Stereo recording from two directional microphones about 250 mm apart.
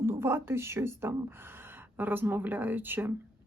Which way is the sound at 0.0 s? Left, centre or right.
Centre.